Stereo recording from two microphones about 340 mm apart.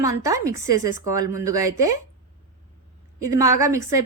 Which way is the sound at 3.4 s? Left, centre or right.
Centre.